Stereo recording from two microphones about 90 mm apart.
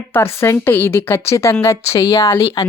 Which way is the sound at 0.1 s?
25° left (ahead or behind).